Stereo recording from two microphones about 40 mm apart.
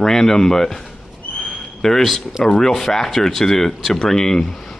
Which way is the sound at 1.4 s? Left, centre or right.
Centre.